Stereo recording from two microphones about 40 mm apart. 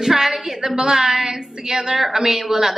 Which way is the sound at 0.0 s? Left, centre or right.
Centre.